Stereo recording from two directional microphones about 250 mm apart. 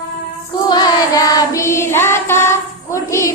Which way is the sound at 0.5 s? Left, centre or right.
Centre.